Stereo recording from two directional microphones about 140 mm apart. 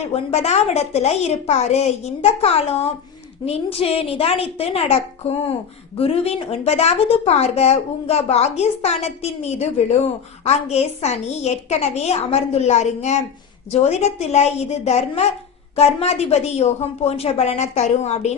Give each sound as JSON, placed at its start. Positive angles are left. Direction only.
{"t": 0.1, "sound": "a woman's voice", "side_deg": 50}